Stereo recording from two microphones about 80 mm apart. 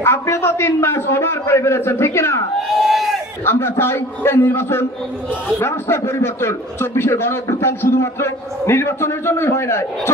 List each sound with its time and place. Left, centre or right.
0.0 s a man's voice: left
2.9 s crowd: centre
3.4 s a man's voice: left